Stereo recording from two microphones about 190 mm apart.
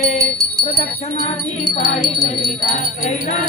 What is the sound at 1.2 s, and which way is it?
Wind chime, 35° left (ahead or behind).